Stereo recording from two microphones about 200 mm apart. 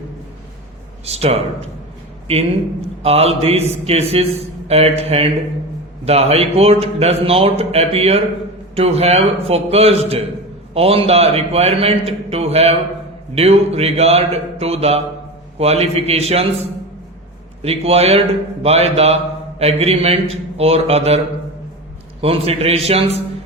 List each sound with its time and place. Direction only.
1.0 s a man's voice: 30° right (ahead or behind)
3.0 s a man's voice: 30° right (ahead or behind)
17.6 s a man's voice: 30° right (ahead or behind)
22.2 s a man's voice: 30° right (ahead or behind)